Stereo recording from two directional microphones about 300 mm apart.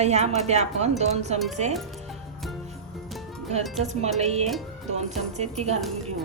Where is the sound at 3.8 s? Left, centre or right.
Right.